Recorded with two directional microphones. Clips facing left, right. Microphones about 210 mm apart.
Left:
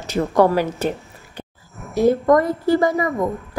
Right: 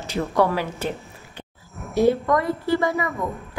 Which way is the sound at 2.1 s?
45° left (ahead or behind).